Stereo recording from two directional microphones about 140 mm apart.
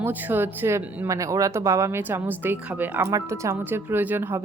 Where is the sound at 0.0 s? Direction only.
15° right (ahead or behind).